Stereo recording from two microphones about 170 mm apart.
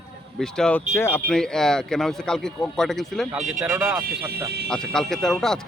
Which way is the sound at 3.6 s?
10° right (ahead or behind).